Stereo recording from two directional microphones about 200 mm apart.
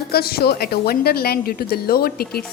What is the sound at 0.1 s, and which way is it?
A woman's voice, 50° left (ahead or behind).